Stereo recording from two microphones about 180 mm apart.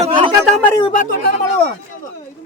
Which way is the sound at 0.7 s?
25° left (ahead or behind).